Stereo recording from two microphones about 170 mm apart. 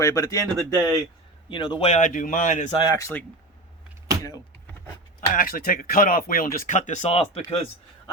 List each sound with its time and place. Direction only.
0.0 s speech: 20° left (ahead or behind)
1.9 s speech: 50° left (ahead or behind)
2.7 s speech: 20° left (ahead or behind)
5.4 s speech: 55° left (ahead or behind); by 7.4 s 35° left (ahead or behind)